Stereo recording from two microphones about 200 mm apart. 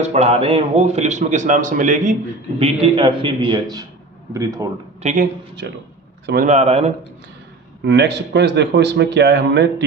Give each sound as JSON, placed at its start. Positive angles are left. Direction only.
{"t": 0.0, "sound": "a man's voice", "side_deg": -35}
{"t": 2.6, "sound": "a man's voice", "side_deg": -30}
{"t": 5.0, "sound": "a man's voice", "side_deg": -40}
{"t": 6.5, "sound": "a man's voice", "side_deg": -30}
{"t": 7.9, "sound": "a man's voice", "side_deg": -55}